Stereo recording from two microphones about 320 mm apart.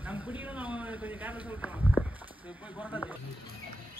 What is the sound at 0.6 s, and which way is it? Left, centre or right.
Speech, centre.